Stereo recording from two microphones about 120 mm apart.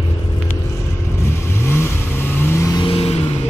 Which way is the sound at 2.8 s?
55° left (ahead or behind).